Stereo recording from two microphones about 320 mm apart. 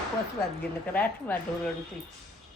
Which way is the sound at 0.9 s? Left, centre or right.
Centre.